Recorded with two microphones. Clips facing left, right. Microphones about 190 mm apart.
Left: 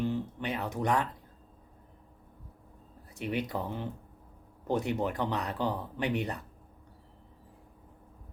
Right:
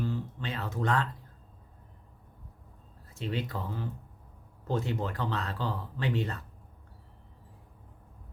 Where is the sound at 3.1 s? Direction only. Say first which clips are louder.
Left 2 dB; 15° left (ahead or behind).